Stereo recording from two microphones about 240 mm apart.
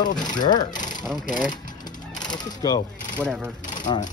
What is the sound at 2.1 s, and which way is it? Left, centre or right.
Speech, centre.